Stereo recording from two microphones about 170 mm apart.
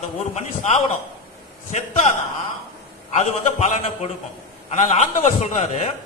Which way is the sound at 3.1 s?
40° left (ahead or behind).